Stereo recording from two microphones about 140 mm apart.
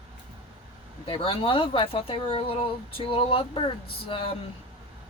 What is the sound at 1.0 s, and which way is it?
Speech, 40° left (ahead or behind).